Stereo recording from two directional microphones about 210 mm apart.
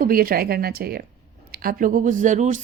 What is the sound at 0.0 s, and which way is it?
A woman's voice, 45° right (ahead or behind).